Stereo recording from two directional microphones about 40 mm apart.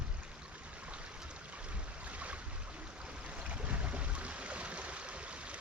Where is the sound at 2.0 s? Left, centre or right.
Right.